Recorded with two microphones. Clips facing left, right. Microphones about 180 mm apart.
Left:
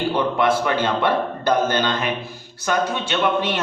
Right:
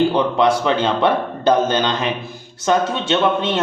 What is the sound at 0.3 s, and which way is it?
A man's voice, 20° right (ahead or behind).